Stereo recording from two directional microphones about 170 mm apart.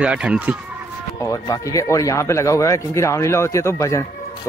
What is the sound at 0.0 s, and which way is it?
Speech, 5° right (ahead or behind).